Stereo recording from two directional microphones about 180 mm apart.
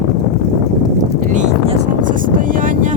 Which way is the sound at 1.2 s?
45° right (ahead or behind).